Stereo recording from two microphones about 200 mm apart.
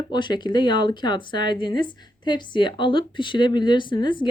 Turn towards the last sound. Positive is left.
turn(degrees=25)  # may be behind; listen again after turning